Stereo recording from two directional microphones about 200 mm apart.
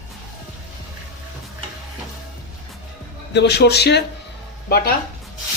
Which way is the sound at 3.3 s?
55° left (ahead or behind).